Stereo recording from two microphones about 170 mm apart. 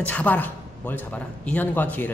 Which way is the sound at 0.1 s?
10° left (ahead or behind).